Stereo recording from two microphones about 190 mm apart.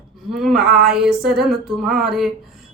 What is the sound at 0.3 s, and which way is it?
Speech, centre (ahead or behind).